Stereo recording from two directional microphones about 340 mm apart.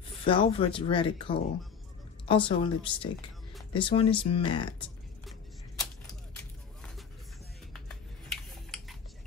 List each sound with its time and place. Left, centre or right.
0.2 s speech: centre